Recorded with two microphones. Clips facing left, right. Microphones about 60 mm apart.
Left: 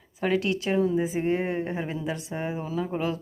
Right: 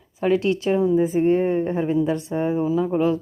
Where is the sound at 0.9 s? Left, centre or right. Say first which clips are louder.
Right 7 dB; centre.